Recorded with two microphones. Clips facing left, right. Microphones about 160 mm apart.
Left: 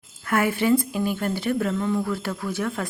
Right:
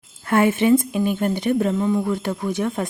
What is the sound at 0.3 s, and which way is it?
Speech, 25° right (ahead or behind).